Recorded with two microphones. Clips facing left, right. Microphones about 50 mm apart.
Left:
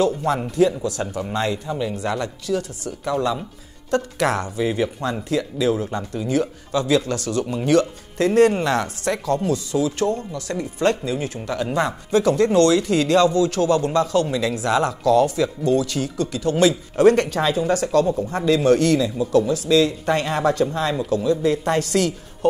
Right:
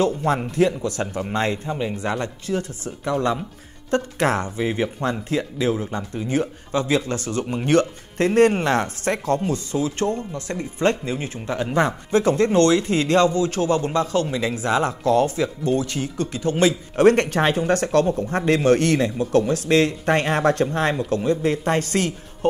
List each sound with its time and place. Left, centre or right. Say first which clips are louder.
0.0 s speech: even; right
5.9 s speech: left 1 dB; centre
6.2 s speech: left 2 dB; right